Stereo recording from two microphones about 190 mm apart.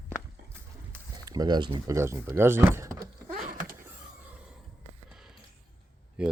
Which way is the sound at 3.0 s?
45° right (ahead or behind).